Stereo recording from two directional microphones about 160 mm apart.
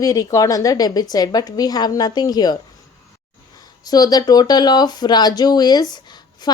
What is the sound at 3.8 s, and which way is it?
Speech, 25° left (ahead or behind).